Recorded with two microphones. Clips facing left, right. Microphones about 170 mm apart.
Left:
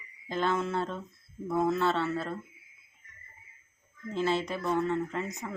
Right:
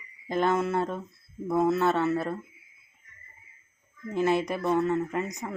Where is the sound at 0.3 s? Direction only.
15° right (ahead or behind).